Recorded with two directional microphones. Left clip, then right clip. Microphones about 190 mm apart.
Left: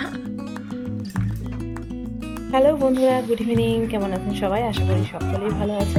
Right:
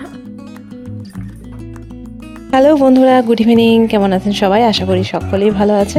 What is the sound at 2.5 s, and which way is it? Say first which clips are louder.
Speech: right 9 dB; 55° right (ahead or behind).